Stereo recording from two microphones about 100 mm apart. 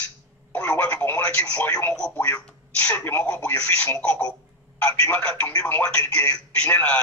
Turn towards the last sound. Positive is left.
turn(degrees=15)  # may be behind; listen again after turning